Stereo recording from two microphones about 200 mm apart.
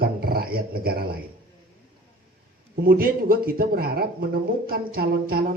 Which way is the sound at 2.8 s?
45° right (ahead or behind).